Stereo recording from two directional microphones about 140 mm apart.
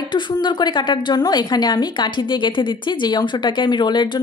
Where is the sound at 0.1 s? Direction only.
35° left (ahead or behind).